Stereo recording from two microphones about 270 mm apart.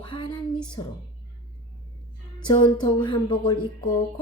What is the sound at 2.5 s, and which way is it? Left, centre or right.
A woman's voice, centre.